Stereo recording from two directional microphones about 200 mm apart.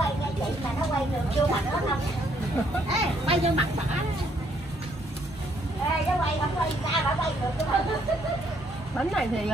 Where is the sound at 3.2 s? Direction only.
30° right (ahead or behind).